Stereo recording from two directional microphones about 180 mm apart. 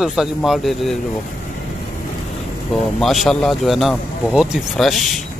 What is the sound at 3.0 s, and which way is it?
Speech, centre (ahead or behind).